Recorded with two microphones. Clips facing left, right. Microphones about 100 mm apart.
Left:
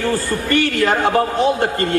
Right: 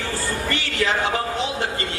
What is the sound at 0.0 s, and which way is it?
A man's voice, 50° left (ahead or behind).